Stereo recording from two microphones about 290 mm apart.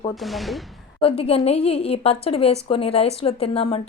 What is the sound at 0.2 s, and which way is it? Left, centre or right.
Speech, centre.